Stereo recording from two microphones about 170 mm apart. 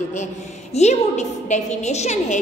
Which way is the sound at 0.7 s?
40° left (ahead or behind).